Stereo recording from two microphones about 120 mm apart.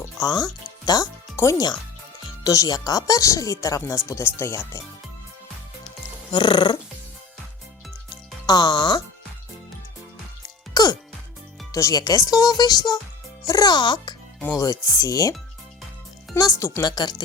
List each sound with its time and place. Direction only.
0.2 s speech: 30° left (ahead or behind)
6.3 s speech: 40° left (ahead or behind)
8.4 s speech: 35° left (ahead or behind)
10.8 s music: 30° left (ahead or behind)
11.7 s speech: 25° left (ahead or behind)
14.5 s speech: 30° left (ahead or behind)